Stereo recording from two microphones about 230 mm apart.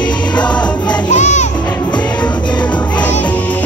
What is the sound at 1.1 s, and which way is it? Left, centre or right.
Music, left.